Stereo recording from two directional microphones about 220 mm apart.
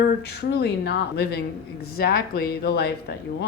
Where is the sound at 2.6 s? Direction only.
45° left (ahead or behind).